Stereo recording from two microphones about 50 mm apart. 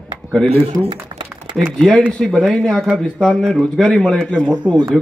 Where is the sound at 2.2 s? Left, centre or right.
Centre.